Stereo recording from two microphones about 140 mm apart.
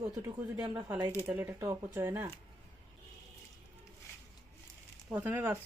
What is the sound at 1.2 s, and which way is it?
Speech, 15° right (ahead or behind).